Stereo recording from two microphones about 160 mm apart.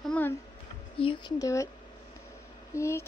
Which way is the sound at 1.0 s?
30° left (ahead or behind).